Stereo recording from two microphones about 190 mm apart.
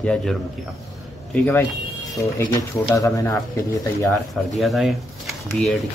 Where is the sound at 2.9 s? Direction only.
15° left (ahead or behind).